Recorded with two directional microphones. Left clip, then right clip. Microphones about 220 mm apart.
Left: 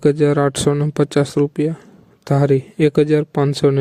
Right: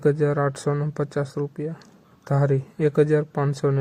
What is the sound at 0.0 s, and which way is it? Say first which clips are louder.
Speech: left 6 dB; 45° left (ahead or behind).